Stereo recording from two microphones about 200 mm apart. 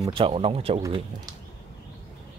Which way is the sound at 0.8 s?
20° right (ahead or behind).